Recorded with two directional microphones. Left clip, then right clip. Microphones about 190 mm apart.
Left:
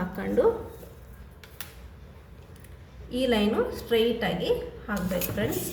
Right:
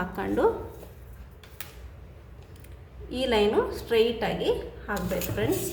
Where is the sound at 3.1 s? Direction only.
40° right (ahead or behind).